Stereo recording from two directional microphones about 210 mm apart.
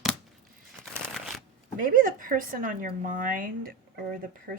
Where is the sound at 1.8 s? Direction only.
40° right (ahead or behind).